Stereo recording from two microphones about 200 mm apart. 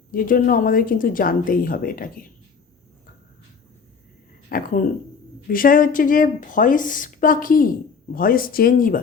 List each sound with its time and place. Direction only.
0.1 s a woman's voice: 45° left (ahead or behind)
4.4 s a woman's voice: 45° left (ahead or behind)